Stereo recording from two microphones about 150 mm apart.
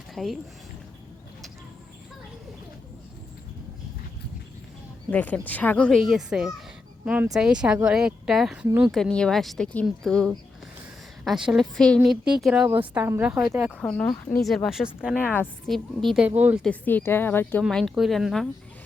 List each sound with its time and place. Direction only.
0.1 s speech: centre (ahead or behind)
5.1 s a woman's voice: 10° left (ahead or behind)
15.1 s speech: 15° left (ahead or behind)
15.6 s a woman's voice: centre (ahead or behind)
16.6 s speech: 10° left (ahead or behind)
17.6 s a woman's voice: 5° left (ahead or behind)